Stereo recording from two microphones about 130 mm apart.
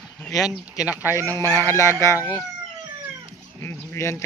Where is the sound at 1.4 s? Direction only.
20° right (ahead or behind).